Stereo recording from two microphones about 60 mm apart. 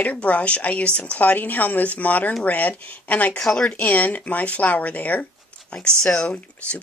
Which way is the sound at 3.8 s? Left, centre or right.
Left.